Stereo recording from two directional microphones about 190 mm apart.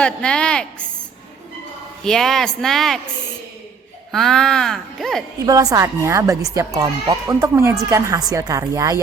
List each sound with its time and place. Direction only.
0.0 s speech: 5° left (ahead or behind)
2.0 s speech: centre (ahead or behind)
4.1 s speech: centre (ahead or behind)
5.5 s speech: 20° right (ahead or behind)